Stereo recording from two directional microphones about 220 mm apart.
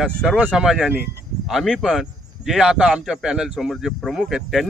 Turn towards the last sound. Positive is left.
turn(degrees=0)  # may be behind; listen again after turning